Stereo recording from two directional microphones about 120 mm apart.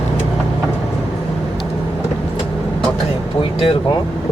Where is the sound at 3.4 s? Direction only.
50° left (ahead or behind).